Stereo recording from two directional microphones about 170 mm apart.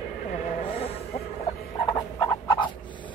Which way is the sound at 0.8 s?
35° left (ahead or behind).